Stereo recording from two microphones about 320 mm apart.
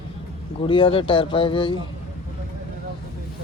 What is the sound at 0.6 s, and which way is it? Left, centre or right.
Speech, centre.